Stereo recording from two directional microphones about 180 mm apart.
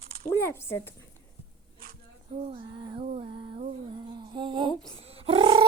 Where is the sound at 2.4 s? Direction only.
30° right (ahead or behind).